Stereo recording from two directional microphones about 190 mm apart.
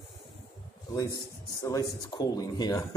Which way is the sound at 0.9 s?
20° left (ahead or behind).